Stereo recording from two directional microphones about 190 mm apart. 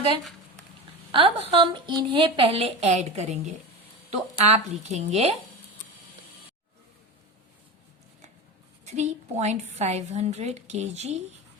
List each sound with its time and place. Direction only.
1.1 s a woman's voice: 30° right (ahead or behind)
8.8 s a woman's voice: 35° right (ahead or behind)